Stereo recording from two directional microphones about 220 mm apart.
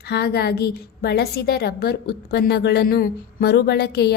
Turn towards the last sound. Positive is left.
turn(degrees=50)  # may be behind; listen again after turning